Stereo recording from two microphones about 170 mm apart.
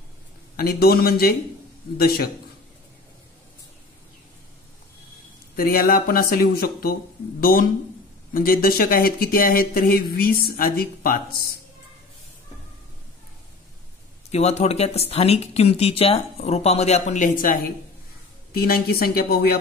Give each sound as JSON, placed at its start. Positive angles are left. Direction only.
{"t": 0.6, "sound": "speech", "side_deg": 65}
{"t": 5.6, "sound": "speech", "side_deg": 60}
{"t": 14.3, "sound": "speech", "side_deg": 40}